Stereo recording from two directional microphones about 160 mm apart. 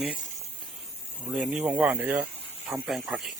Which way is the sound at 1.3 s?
10° right (ahead or behind).